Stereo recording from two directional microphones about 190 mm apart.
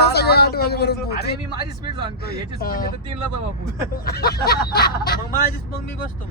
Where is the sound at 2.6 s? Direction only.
50° left (ahead or behind).